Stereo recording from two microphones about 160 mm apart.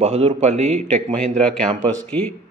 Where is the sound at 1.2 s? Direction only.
5° left (ahead or behind).